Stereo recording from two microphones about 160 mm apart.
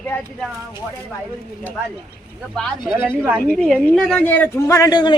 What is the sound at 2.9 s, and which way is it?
Speech, 10° right (ahead or behind).